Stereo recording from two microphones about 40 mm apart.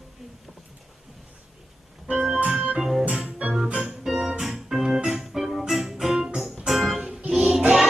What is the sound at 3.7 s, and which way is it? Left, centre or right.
Music, centre.